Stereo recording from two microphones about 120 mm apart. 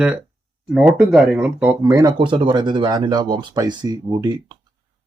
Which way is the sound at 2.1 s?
40° right (ahead or behind).